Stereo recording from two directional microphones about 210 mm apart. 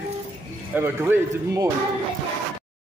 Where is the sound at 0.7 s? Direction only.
10° right (ahead or behind).